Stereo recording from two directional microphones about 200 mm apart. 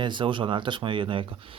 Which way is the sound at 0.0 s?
25° right (ahead or behind).